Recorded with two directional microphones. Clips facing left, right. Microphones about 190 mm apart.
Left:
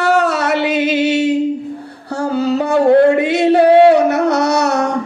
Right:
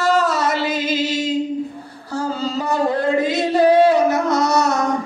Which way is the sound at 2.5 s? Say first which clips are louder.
Left 10 dB; 65° left (ahead or behind).